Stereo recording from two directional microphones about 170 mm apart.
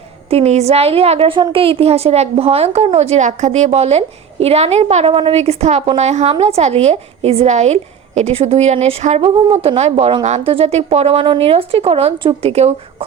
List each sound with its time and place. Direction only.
0.3 s speech: 40° right (ahead or behind)